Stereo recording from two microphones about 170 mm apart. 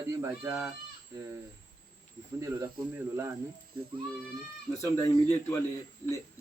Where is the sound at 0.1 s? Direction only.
15° right (ahead or behind).